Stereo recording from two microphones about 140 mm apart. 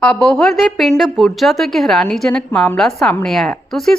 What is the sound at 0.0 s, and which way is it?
A woman's voice, 5° left (ahead or behind).